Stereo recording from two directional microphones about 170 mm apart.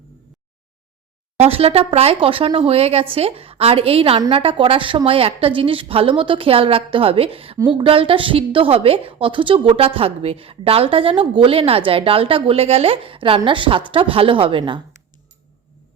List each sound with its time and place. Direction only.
1.4 s speech: 35° right (ahead or behind)